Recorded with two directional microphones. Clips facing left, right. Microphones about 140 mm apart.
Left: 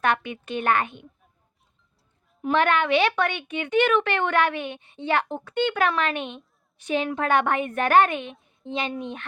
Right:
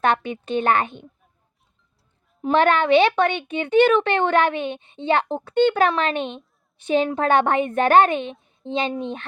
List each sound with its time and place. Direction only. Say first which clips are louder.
0.0 s speech: right 3 dB; 30° right (ahead or behind)
2.4 s speech: right 4 dB; 30° right (ahead or behind)